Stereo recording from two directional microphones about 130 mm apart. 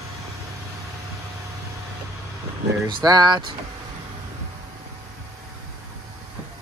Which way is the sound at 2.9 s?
35° right (ahead or behind).